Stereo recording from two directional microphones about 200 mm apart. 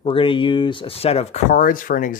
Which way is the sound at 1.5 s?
45° left (ahead or behind).